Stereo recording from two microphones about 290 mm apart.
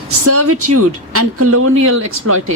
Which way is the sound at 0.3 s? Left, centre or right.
Right.